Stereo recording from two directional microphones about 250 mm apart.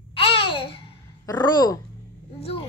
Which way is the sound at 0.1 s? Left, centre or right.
Left.